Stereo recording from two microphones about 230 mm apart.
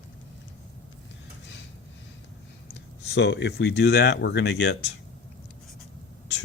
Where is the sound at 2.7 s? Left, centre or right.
Left.